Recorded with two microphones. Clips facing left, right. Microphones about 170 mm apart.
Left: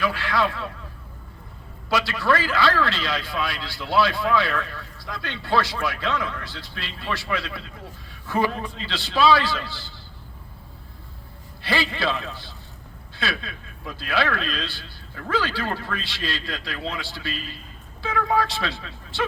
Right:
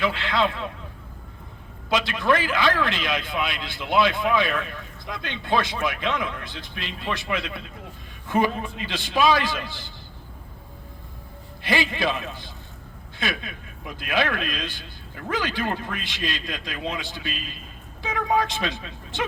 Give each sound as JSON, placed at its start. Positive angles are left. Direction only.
{"t": 0.0, "sound": "a man's voice", "side_deg": -20}
{"t": 1.9, "sound": "a man's voice", "side_deg": -20}
{"t": 11.6, "sound": "a man's voice", "side_deg": -20}